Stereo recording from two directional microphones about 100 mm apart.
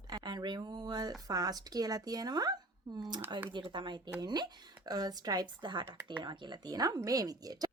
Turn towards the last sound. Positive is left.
turn(degrees=-40)  # may be behind; listen again after turning